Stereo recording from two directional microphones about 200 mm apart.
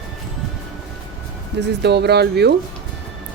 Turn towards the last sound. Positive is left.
turn(degrees=-55)  # may be behind; listen again after turning